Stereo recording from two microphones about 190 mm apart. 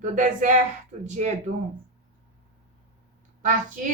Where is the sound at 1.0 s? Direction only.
40° right (ahead or behind).